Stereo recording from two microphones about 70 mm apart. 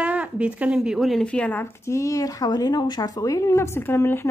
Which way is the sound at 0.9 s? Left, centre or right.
Centre.